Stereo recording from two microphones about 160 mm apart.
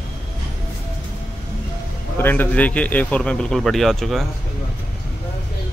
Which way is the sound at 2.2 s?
10° left (ahead or behind).